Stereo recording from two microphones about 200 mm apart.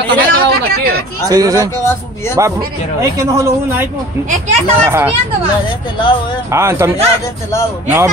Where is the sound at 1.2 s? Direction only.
20° right (ahead or behind).